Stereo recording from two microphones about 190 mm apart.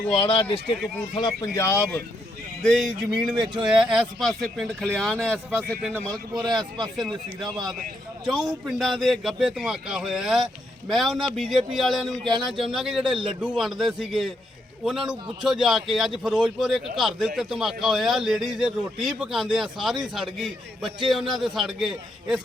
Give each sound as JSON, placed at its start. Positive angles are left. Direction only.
{"t": 0.1, "sound": "speech", "side_deg": 25}
{"t": 2.6, "sound": "a man's voice", "side_deg": 0}
{"t": 6.3, "sound": "speech", "side_deg": -20}
{"t": 8.2, "sound": "a man's voice", "side_deg": 0}